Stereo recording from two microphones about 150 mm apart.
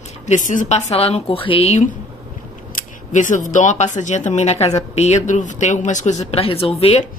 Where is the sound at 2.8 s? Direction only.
55° left (ahead or behind).